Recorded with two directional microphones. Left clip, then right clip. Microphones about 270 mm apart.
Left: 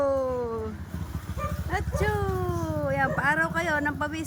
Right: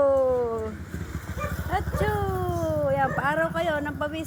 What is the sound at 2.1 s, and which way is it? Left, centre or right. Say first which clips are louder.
Cat: right 1 dB; centre.